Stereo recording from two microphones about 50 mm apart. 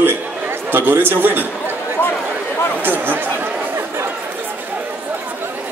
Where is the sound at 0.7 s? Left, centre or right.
Right.